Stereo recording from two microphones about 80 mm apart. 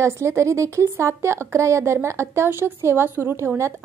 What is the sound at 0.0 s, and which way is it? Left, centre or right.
A woman's voice, right.